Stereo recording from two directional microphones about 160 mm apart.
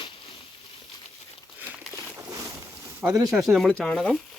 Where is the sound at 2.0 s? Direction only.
20° right (ahead or behind).